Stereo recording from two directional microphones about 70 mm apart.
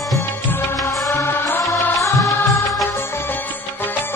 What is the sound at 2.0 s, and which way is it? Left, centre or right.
Music, left.